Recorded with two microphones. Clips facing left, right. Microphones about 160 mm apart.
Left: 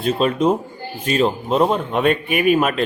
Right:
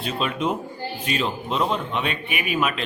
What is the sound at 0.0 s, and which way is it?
A man's voice, 40° left (ahead or behind).